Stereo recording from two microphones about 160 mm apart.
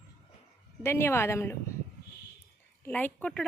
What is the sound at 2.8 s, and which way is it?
Speech, 10° left (ahead or behind).